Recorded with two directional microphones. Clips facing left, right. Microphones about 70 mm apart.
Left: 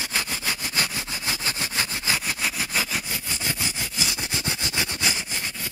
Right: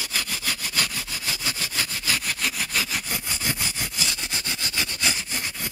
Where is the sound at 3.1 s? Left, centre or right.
Centre.